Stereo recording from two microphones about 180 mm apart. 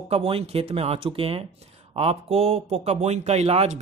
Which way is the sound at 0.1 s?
35° right (ahead or behind).